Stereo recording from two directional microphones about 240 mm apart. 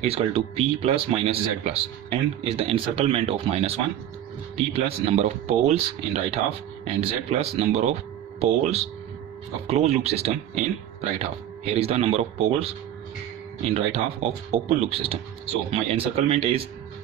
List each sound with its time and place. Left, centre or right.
0.0 s speech: right
4.7 s speech: right
13.7 s speech: right